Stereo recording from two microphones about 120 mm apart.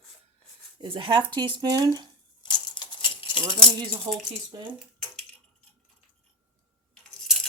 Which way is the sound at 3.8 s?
35° right (ahead or behind).